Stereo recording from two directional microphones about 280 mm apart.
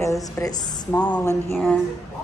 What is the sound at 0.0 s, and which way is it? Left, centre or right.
A woman's voice, centre.